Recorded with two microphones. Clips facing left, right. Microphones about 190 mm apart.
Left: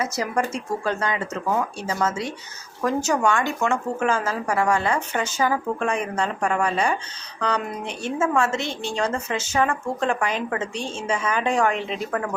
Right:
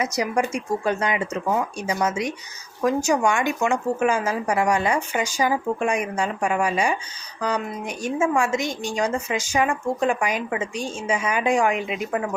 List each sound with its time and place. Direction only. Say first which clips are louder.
0.0 s a woman's voice: right 1 dB; 15° right (ahead or behind)